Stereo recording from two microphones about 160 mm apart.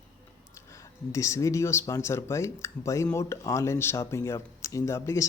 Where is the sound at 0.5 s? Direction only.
20° left (ahead or behind).